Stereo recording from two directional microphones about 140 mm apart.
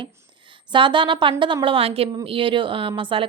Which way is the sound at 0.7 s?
35° right (ahead or behind).